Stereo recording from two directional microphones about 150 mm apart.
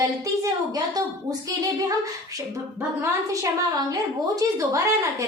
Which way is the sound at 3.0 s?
25° right (ahead or behind).